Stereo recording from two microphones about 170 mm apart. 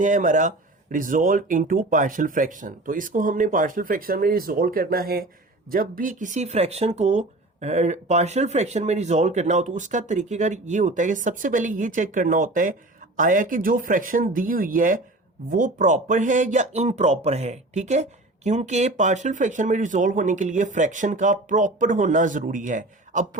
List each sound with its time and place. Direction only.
0.0 s speech: 50° right (ahead or behind)